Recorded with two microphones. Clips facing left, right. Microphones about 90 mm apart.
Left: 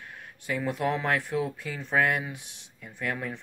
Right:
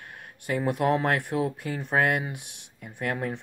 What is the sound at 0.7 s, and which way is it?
Speech, 55° right (ahead or behind).